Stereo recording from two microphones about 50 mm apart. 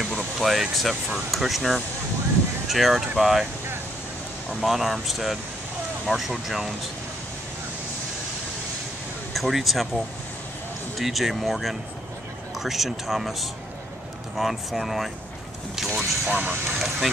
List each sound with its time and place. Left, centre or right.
0.4 s speech: centre
4.6 s speech: centre
9.3 s speech: centre
16.3 s speech: right
16.7 s speech: centre